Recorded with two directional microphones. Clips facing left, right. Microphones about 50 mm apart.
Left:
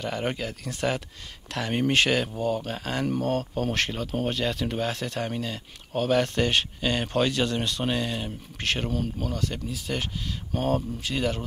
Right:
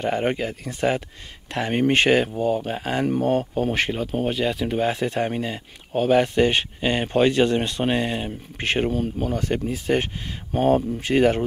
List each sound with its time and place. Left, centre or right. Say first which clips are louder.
0.0 s speech: right 6 dB; right
4.8 s speech: right 7 dB; right